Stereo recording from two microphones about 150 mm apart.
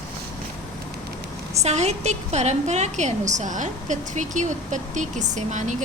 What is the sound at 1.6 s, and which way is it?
A woman's voice, 50° right (ahead or behind).